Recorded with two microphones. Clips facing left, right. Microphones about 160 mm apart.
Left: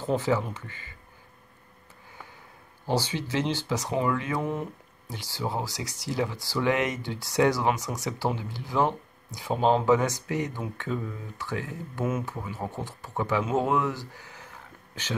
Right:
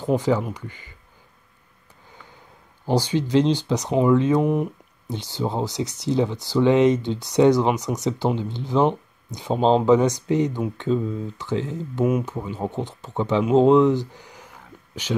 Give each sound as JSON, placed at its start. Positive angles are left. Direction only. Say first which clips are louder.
{"t": 0.0, "sound": "speech", "louder": "right 5 dB", "side_deg": -15}
{"t": 2.9, "sound": "speech", "louder": "right 8 dB", "side_deg": -15}